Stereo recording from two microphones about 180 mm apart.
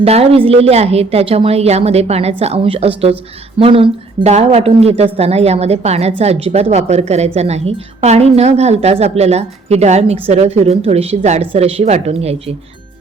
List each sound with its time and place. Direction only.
0.0 s a woman's voice: 35° right (ahead or behind)